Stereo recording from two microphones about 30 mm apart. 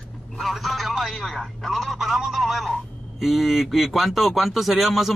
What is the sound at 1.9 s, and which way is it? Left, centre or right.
A man's voice, centre.